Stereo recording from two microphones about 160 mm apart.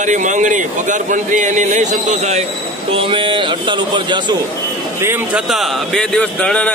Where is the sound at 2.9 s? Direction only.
30° right (ahead or behind).